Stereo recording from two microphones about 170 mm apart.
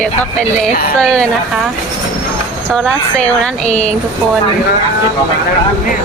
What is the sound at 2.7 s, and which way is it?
Speech, 5° left (ahead or behind).